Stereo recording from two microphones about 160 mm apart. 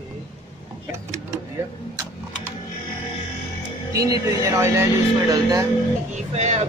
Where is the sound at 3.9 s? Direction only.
20° right (ahead or behind).